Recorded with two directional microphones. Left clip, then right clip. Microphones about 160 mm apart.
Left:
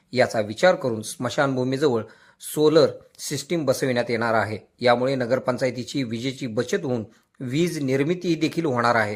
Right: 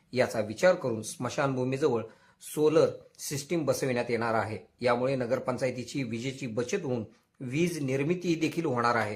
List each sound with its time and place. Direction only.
0.1 s speech: 20° left (ahead or behind)